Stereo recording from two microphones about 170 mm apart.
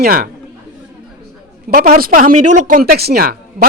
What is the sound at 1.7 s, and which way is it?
A man's voice, 60° right (ahead or behind).